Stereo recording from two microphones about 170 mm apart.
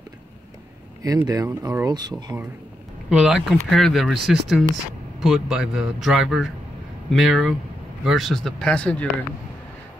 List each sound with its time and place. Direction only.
1.0 s speech: 20° right (ahead or behind)
3.1 s speech: 5° right (ahead or behind)